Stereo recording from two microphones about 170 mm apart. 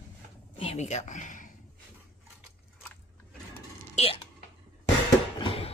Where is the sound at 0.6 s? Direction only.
40° left (ahead or behind).